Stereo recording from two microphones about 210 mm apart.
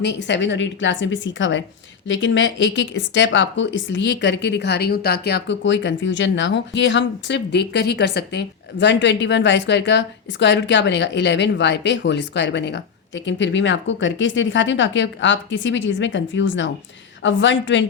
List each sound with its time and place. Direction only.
0.0 s speech: 55° left (ahead or behind)